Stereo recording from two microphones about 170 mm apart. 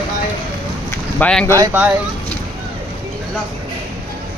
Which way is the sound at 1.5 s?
15° right (ahead or behind).